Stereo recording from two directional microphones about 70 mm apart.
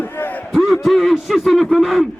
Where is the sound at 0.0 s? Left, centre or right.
Left.